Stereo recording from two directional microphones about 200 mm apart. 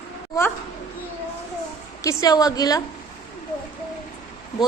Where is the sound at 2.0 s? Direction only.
15° left (ahead or behind).